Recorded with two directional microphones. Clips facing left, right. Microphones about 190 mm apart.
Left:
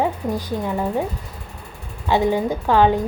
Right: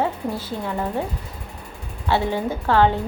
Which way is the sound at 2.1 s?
15° left (ahead or behind).